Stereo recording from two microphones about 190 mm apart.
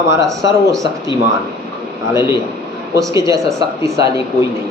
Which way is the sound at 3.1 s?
15° right (ahead or behind).